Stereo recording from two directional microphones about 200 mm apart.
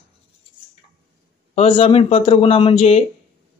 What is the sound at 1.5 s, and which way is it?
Speech, 30° left (ahead or behind).